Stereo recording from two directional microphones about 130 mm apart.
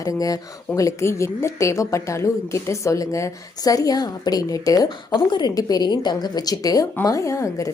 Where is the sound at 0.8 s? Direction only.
25° left (ahead or behind).